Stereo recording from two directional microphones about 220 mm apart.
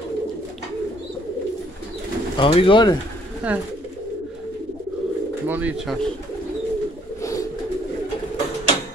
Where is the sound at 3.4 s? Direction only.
5° right (ahead or behind).